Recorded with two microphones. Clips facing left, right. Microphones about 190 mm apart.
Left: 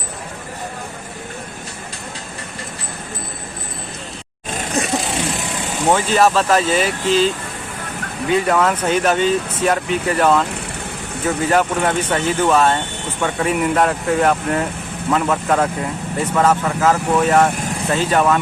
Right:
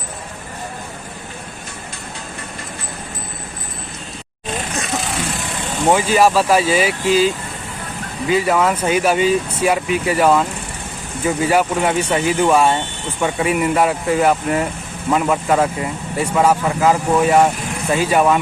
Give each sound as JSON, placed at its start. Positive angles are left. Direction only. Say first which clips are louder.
{"t": 4.8, "sound": "vehicle", "louder": "left 5 dB", "side_deg": 35}
{"t": 5.9, "sound": "speech", "louder": "right 1 dB", "side_deg": -10}
{"t": 8.3, "sound": "speech", "louder": "even", "side_deg": -5}